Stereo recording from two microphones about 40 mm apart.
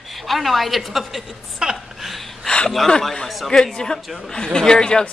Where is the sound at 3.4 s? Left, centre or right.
Centre.